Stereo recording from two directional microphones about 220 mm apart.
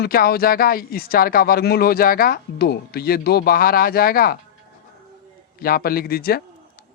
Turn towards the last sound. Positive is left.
turn(degrees=45)  # may be behind; listen again after turning